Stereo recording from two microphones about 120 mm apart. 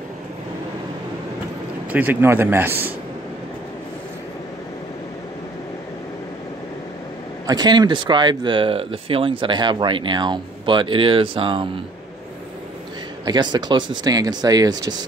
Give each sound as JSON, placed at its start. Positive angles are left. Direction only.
{"t": 1.9, "sound": "speech", "side_deg": -15}
{"t": 7.4, "sound": "speech", "side_deg": -35}
{"t": 13.2, "sound": "speech", "side_deg": -35}